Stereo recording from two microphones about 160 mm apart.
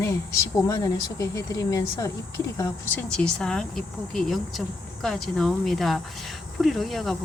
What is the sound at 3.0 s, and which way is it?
Speech, 5° left (ahead or behind).